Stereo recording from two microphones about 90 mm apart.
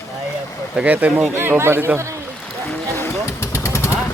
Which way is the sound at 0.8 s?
15° right (ahead or behind).